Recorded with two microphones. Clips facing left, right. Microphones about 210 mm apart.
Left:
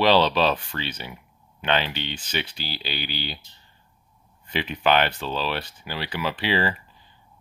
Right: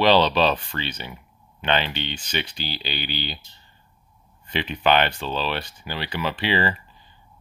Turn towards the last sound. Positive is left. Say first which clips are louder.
# right 1 dB
turn(degrees=5)  # may be behind; listen again after turning